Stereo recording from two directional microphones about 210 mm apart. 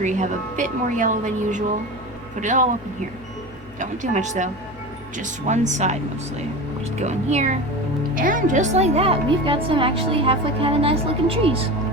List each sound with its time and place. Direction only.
0.0 s a woman's voice: 35° right (ahead or behind)
3.8 s a woman's voice: 35° right (ahead or behind)
7.0 s a woman's voice: 30° right (ahead or behind)